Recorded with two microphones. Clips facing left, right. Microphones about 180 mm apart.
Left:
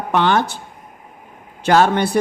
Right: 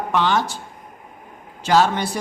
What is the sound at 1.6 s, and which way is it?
Speech, 55° left (ahead or behind).